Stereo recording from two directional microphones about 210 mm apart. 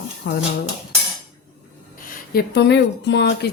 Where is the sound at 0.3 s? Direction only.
55° left (ahead or behind).